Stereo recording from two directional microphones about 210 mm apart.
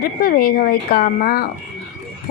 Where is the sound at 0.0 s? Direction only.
45° left (ahead or behind).